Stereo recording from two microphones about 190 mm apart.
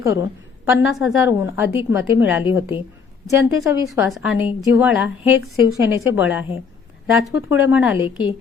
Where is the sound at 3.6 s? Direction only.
Centre (ahead or behind).